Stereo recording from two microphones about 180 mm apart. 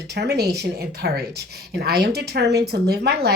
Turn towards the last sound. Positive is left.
turn(degrees=-65)  # may be behind; listen again after turning